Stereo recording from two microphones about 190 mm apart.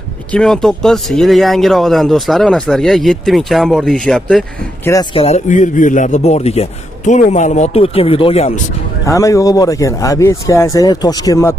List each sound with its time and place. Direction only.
0.3 s speech: 5° left (ahead or behind)
5.1 s a man's voice: 35° left (ahead or behind)
9.0 s speech: 15° left (ahead or behind)